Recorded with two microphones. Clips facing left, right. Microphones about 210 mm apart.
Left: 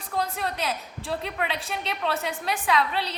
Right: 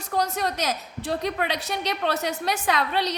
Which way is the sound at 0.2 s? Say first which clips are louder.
Right 3 dB; 40° right (ahead or behind).